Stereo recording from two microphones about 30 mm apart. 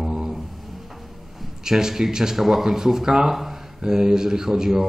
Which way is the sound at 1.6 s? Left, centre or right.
Centre.